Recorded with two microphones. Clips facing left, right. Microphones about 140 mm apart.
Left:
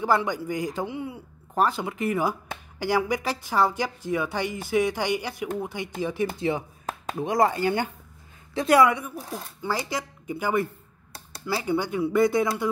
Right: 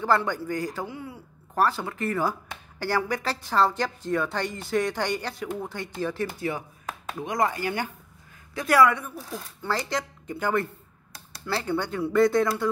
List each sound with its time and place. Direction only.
0.0 s a woman's voice: 15° left (ahead or behind)